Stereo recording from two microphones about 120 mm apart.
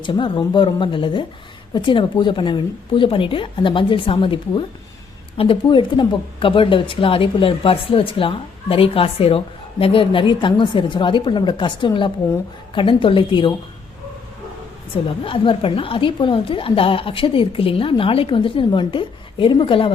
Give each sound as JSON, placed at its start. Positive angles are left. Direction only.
{"t": 0.0, "sound": "a woman's voice", "side_deg": 45}
{"t": 15.2, "sound": "a woman's voice", "side_deg": 50}